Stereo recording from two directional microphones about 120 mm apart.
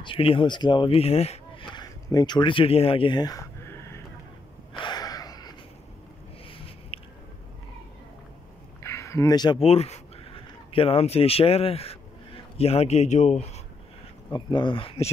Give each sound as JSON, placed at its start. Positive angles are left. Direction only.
{"t": 0.0, "sound": "speech", "side_deg": 45}
{"t": 1.6, "sound": "speech", "side_deg": 35}
{"t": 4.7, "sound": "a sound", "side_deg": 35}
{"t": 6.9, "sound": "biting", "side_deg": 55}
{"t": 8.8, "sound": "a sound", "side_deg": 25}
{"t": 9.6, "sound": "a man's voice", "side_deg": 60}
{"t": 14.3, "sound": "speech", "side_deg": 40}